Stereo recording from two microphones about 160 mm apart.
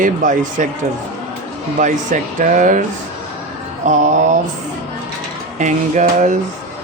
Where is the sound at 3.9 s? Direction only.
50° right (ahead or behind).